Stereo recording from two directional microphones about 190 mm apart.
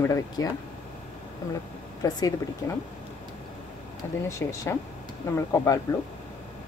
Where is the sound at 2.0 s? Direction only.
20° left (ahead or behind).